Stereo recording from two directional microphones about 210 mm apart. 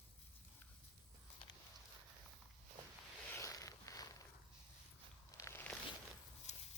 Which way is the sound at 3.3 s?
15° left (ahead or behind).